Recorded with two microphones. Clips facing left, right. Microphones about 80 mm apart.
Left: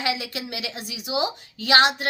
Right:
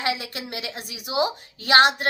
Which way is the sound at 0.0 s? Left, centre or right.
Right.